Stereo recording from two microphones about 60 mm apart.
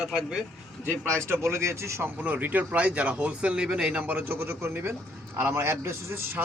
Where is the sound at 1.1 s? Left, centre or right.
Right.